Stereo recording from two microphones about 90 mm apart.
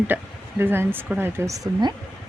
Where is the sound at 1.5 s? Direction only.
50° right (ahead or behind).